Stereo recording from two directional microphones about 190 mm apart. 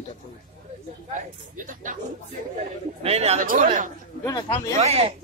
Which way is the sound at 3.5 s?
45° right (ahead or behind).